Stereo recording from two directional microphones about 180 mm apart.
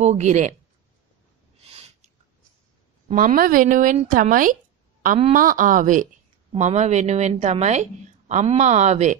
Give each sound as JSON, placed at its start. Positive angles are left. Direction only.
{"t": 0.0, "sound": "a woman's voice", "side_deg": -40}
{"t": 1.6, "sound": "a sound", "side_deg": -35}
{"t": 3.1, "sound": "a woman's voice", "side_deg": -45}